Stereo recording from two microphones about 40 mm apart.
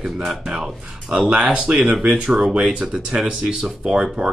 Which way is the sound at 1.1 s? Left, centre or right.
Right.